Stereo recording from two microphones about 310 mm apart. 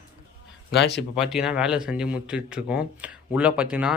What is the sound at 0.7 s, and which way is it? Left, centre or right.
Speech, left.